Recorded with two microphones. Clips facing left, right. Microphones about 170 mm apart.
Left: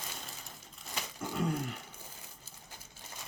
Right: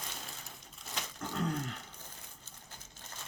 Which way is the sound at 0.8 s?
10° left (ahead or behind).